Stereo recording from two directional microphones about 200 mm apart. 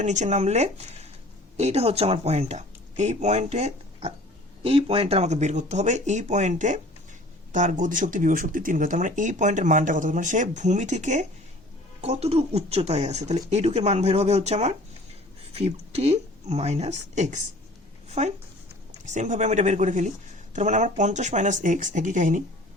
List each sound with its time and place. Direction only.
0.0 s speech: 35° right (ahead or behind)